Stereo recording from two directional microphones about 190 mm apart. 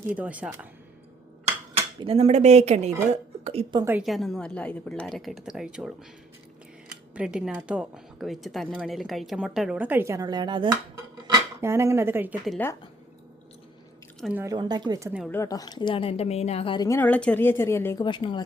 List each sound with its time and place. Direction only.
0.1 s speech: 5° right (ahead or behind)
1.7 s a woman's voice: 30° right (ahead or behind)
3.8 s speech: 5° right (ahead or behind)
14.3 s speech: 20° right (ahead or behind)
15.3 s a woman's voice: 15° left (ahead or behind)
18.0 s a woman's voice: 25° left (ahead or behind)